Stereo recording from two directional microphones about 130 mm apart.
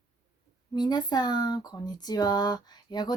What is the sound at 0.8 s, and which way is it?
Speech, 30° left (ahead or behind).